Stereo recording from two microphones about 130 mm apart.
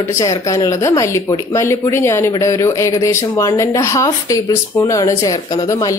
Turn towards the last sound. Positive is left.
turn(degrees=30)  # may be behind; listen again after turning